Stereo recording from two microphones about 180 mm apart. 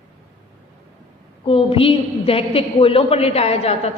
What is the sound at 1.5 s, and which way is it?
A woman's voice, 30° left (ahead or behind).